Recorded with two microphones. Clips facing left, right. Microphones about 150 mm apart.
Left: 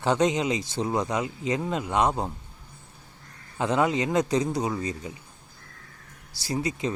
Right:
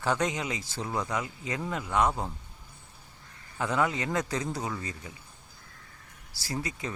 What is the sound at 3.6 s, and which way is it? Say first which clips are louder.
Speech: left 5 dB; 20° left (ahead or behind).